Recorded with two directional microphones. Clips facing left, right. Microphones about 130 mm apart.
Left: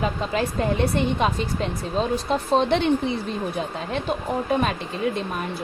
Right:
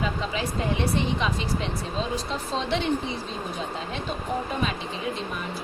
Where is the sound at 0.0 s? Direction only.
50° left (ahead or behind).